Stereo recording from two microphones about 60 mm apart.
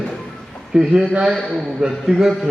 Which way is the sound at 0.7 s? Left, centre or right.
Centre.